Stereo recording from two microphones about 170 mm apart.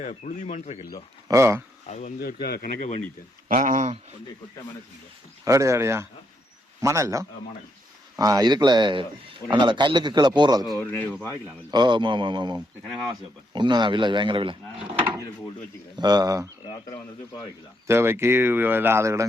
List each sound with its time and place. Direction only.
0.0 s speech: 45° left (ahead or behind)
1.3 s speech: 15° right (ahead or behind)
1.9 s speech: 45° left (ahead or behind)
2.1 s speech: 65° left (ahead or behind)
3.5 s speech: 50° right (ahead or behind)
5.5 s speech: 20° right (ahead or behind)
10.8 s speech: 10° left (ahead or behind)
11.7 s speech: 25° right (ahead or behind)
16.0 s speech: 25° right (ahead or behind)
16.6 s speech: 20° left (ahead or behind)
17.8 s speech: 15° right (ahead or behind)